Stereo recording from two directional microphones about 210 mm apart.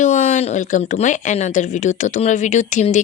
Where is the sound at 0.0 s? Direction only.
35° left (ahead or behind).